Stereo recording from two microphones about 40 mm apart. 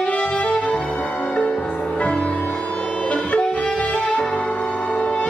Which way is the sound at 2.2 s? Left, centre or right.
Left.